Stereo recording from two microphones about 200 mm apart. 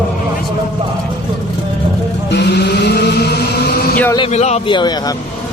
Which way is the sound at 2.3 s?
55° left (ahead or behind).